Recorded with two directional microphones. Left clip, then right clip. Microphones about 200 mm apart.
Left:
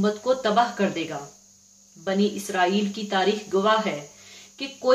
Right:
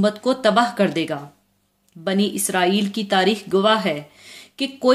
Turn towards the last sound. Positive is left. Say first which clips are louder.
# right 7 dB
turn(degrees=-50)  # may be behind; listen again after turning